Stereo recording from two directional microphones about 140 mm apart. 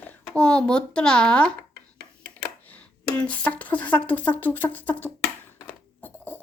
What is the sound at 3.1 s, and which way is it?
Speech, 10° left (ahead or behind).